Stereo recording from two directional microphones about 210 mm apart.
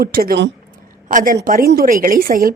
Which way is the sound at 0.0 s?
45° right (ahead or behind).